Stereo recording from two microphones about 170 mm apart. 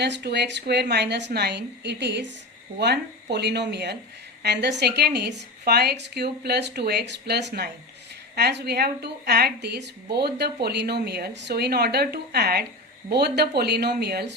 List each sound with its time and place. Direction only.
0.0 s a woman's voice: 75° right (ahead or behind)